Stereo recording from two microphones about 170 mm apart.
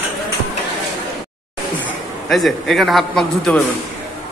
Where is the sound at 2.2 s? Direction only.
Centre (ahead or behind).